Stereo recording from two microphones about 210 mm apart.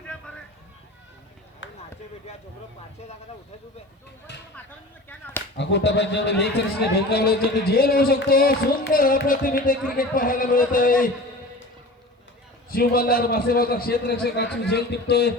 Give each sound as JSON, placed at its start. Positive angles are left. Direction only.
{"t": 1.6, "sound": "basketball bounce", "side_deg": 60}
{"t": 4.3, "sound": "speech", "side_deg": 55}
{"t": 5.0, "sound": "speech", "side_deg": 10}
{"t": 5.5, "sound": "a man's voice", "side_deg": 55}
{"t": 12.7, "sound": "speech", "side_deg": 45}